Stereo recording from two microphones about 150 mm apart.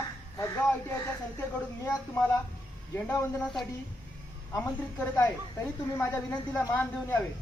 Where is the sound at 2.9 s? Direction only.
15° left (ahead or behind).